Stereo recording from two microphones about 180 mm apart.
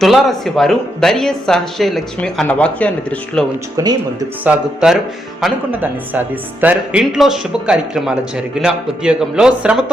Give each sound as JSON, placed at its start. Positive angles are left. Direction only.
{"t": 0.0, "sound": "speech", "side_deg": 0}
{"t": 3.8, "sound": "speech", "side_deg": -20}
{"t": 4.4, "sound": "speech", "side_deg": -5}